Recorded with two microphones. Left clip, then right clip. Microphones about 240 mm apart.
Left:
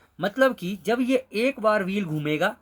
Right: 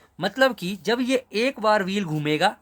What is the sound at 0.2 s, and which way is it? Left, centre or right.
Speech, right.